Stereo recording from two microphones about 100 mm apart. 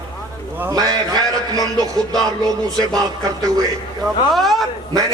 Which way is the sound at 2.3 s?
40° right (ahead or behind).